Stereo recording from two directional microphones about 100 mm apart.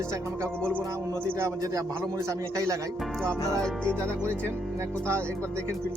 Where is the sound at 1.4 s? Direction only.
30° right (ahead or behind).